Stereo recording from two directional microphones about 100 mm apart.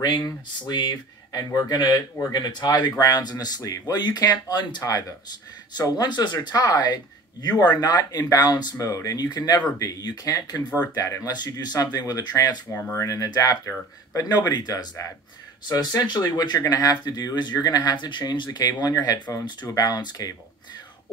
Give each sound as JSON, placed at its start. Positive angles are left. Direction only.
{"t": 0.0, "sound": "speech", "side_deg": 45}
{"t": 12.7, "sound": "speech", "side_deg": 20}
{"t": 13.0, "sound": "speech", "side_deg": 35}